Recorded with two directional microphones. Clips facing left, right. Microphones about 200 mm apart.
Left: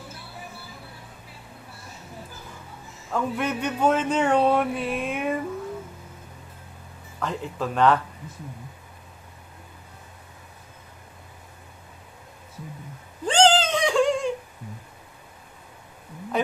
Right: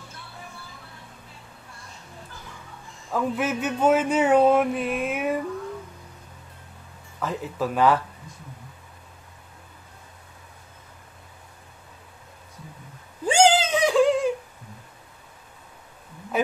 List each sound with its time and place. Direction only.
3.1 s speech: 5° right (ahead or behind)
7.2 s speech: 5° right (ahead or behind)
13.2 s cat: 10° right (ahead or behind)